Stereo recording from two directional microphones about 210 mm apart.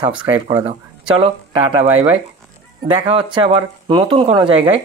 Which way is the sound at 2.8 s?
25° right (ahead or behind).